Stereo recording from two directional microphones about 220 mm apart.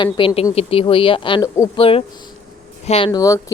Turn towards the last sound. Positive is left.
turn(degrees=15)  # may be behind; listen again after turning